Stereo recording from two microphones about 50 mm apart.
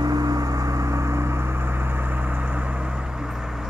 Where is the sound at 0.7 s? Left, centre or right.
Right.